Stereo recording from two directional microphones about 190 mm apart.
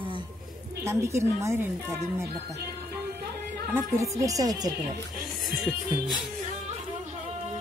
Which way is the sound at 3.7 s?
15° right (ahead or behind).